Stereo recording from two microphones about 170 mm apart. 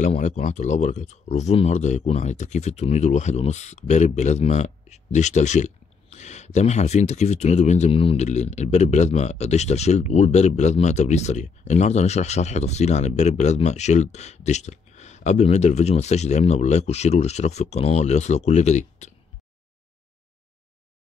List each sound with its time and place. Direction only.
0.0 s speech: 45° left (ahead or behind)